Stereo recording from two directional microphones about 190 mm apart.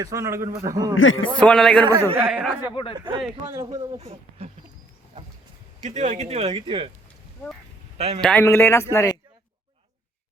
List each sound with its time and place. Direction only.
0.0 s a man's voice: 15° right (ahead or behind)
0.9 s a man's voice: 90° left
1.4 s a man's voice: 5° left (ahead or behind)
1.8 s a man's voice: 20° right (ahead or behind)
2.2 s a man's voice: 5° right (ahead or behind)
3.9 s speech: 35° right (ahead or behind)
5.8 s speech: 35° right (ahead or behind)
7.9 s a man's voice: 35° right (ahead or behind)
8.2 s speech: 5° left (ahead or behind)